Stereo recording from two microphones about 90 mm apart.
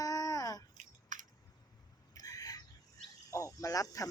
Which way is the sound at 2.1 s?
40° left (ahead or behind).